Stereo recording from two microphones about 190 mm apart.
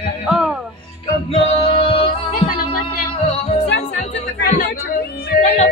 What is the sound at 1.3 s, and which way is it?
Music, 30° left (ahead or behind).